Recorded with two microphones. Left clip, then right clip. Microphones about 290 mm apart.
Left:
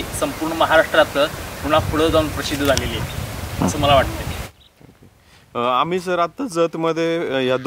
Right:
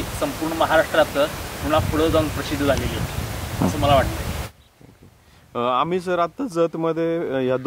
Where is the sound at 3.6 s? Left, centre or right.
Centre.